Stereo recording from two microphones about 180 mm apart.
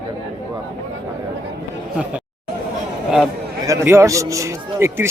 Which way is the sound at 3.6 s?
15° right (ahead or behind).